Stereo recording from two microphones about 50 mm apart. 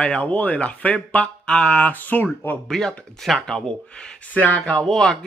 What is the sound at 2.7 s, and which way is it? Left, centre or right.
Speech, centre.